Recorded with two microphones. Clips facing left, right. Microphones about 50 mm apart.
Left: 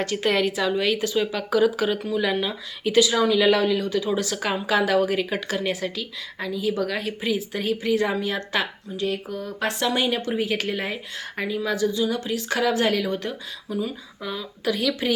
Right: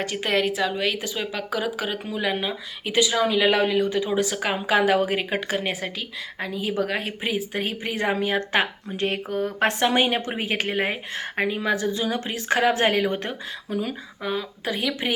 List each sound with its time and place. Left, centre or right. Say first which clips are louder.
0.0 s speech: left 1 dB; centre; by 8.6 s right
9.0 s a woman's voice: right 2 dB; right
14.3 s speech: left 4 dB; right